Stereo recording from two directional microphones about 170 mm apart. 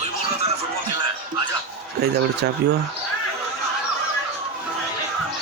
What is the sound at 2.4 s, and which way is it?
Speech, 80° right.